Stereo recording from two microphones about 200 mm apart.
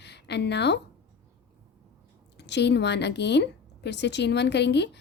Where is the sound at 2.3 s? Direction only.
60° left (ahead or behind).